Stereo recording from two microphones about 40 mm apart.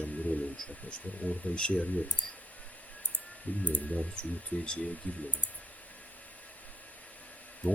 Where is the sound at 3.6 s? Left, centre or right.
Left.